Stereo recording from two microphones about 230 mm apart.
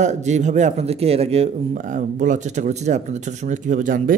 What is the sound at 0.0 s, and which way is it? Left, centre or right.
A man's voice, right.